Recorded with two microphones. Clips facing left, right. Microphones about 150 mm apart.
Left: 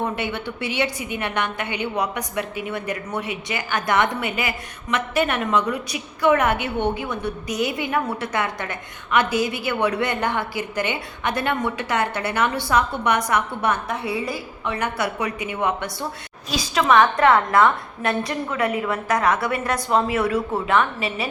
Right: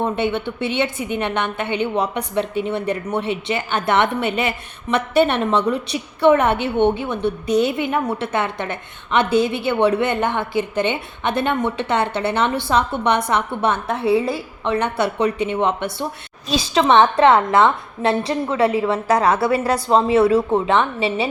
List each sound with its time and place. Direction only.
0.0 s a woman's voice: 20° right (ahead or behind)